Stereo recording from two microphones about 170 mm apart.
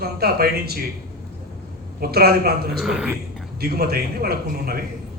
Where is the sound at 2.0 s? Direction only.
65° right (ahead or behind).